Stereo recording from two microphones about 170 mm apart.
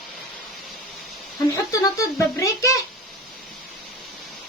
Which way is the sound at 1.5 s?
20° left (ahead or behind).